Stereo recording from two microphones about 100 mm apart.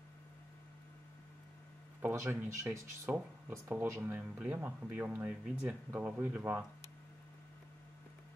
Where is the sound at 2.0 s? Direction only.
25° right (ahead or behind).